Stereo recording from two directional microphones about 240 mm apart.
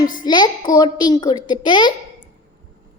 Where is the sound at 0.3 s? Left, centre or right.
Centre.